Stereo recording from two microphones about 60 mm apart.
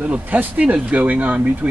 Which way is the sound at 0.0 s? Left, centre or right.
Right.